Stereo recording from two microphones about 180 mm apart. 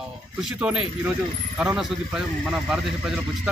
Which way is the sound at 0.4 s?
5° right (ahead or behind).